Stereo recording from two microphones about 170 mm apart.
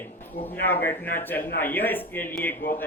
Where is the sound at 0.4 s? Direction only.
10° left (ahead or behind).